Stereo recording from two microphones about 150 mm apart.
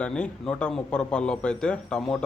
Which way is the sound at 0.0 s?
5° left (ahead or behind).